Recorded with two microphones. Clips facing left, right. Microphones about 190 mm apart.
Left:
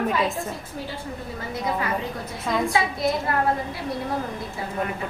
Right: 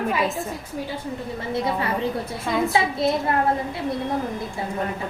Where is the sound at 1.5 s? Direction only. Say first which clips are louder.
Right 3 dB; 30° right (ahead or behind).